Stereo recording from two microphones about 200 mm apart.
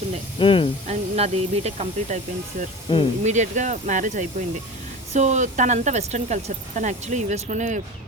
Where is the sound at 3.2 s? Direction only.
35° right (ahead or behind).